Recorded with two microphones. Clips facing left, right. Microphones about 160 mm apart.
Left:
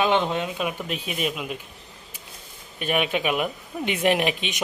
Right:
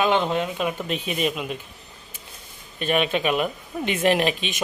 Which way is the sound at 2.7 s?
10° left (ahead or behind).